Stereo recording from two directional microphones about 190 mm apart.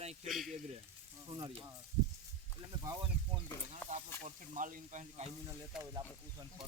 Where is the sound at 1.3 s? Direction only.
25° right (ahead or behind).